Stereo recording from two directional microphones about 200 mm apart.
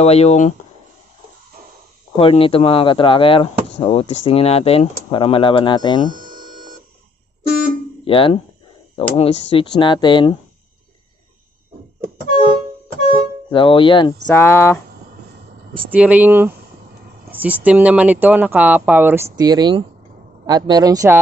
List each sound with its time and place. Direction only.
0.0 s speech: 30° left (ahead or behind)
2.1 s speech: 25° left (ahead or behind)
8.0 s speech: 25° left (ahead or behind)
13.0 s music: 25° left (ahead or behind)
14.2 s speech: 10° left (ahead or behind)
15.9 s a man's voice: 5° right (ahead or behind)